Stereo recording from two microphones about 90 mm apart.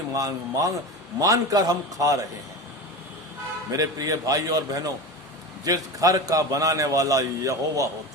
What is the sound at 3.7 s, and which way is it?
A man's voice, 40° right (ahead or behind).